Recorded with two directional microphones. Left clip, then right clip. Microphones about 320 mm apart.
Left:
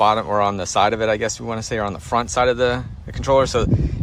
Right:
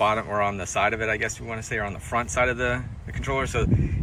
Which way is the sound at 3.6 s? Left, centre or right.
Left.